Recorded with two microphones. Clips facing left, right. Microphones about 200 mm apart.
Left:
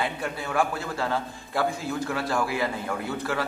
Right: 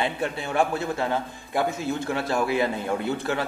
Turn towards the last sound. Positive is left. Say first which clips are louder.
# right 2 dB
turn(degrees=-25)  # may be behind; listen again after turning